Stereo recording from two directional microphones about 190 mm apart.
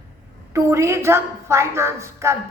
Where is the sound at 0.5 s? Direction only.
15° right (ahead or behind).